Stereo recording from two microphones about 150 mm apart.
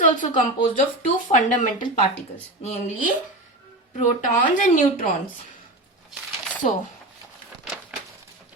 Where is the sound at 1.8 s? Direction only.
45° left (ahead or behind).